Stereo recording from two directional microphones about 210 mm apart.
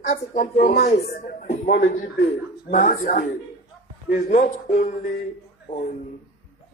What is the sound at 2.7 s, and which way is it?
Speech, 40° left (ahead or behind).